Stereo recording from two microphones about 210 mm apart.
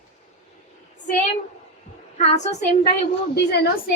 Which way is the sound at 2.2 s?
30° left (ahead or behind).